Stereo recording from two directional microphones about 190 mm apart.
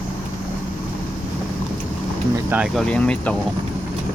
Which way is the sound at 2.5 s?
Centre (ahead or behind).